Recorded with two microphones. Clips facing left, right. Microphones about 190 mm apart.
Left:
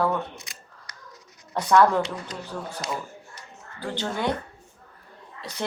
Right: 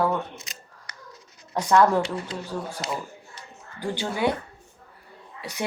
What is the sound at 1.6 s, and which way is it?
Speech, 10° right (ahead or behind).